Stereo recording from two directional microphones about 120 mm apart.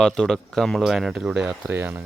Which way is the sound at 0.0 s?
5° left (ahead or behind).